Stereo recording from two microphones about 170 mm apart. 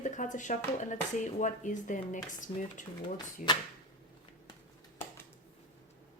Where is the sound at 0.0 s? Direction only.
45° left (ahead or behind).